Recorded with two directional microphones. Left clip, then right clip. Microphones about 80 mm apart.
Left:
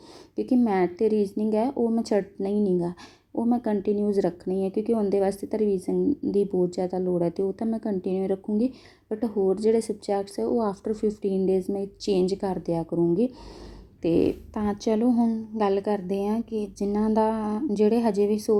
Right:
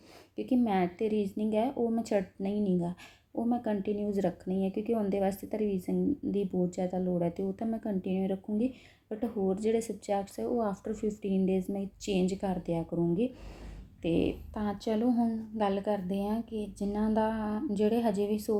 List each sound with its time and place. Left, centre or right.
0.3 s speech: left
14.5 s speech: left